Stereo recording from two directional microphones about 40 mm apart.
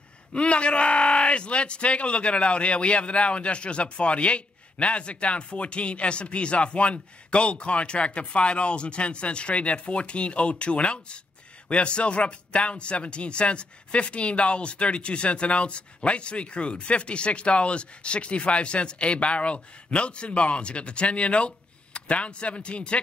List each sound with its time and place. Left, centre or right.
0.3 s speech: left